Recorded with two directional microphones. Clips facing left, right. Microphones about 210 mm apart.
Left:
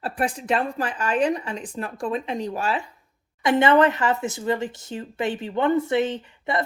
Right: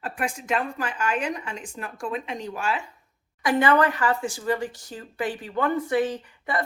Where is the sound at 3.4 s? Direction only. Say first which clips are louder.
Left 3 dB; 25° left (ahead or behind).